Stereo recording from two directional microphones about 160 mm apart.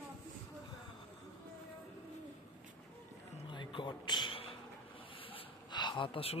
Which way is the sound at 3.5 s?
30° left (ahead or behind).